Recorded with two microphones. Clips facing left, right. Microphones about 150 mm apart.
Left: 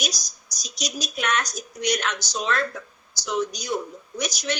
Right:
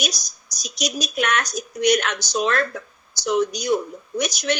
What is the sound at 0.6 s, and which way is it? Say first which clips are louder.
Speech: right 5 dB; 60° right (ahead or behind).